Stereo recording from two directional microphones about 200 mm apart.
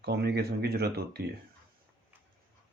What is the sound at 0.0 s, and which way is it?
Speech, 55° right (ahead or behind).